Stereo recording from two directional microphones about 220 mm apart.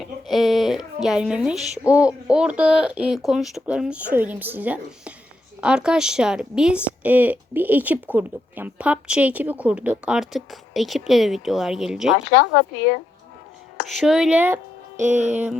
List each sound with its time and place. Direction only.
0.0 s a sound: centre (ahead or behind)
0.9 s speech: centre (ahead or behind)
12.1 s speech: 55° left (ahead or behind)
14.0 s speech: 5° right (ahead or behind)
14.9 s music: 35° right (ahead or behind)